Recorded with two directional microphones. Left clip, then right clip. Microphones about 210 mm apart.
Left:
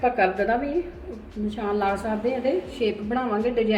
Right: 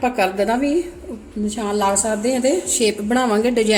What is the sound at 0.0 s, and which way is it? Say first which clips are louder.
A woman's voice: right 3 dB; 55° right (ahead or behind).